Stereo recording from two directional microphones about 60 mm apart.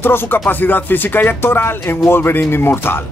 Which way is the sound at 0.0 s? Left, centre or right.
Left.